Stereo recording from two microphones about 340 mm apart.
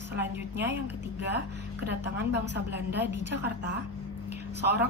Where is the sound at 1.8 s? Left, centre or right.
Right.